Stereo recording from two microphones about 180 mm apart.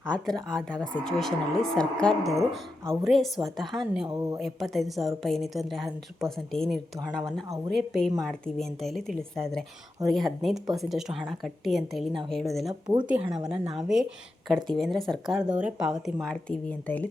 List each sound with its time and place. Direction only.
0.1 s a woman's voice: 5° left (ahead or behind)
4.0 s speech: 20° right (ahead or behind)
4.4 s a woman's voice: centre (ahead or behind)